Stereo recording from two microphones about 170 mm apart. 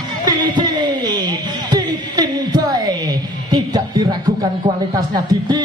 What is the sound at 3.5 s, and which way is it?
Music, 20° right (ahead or behind).